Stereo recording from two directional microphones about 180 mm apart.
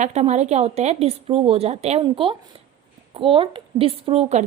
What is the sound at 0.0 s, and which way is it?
A woman's voice, 40° right (ahead or behind).